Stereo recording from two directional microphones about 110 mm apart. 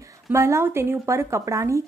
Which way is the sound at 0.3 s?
25° right (ahead or behind).